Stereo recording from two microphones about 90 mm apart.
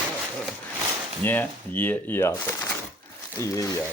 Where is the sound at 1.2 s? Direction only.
20° left (ahead or behind).